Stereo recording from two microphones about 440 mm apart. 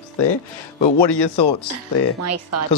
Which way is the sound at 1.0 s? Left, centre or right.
Left.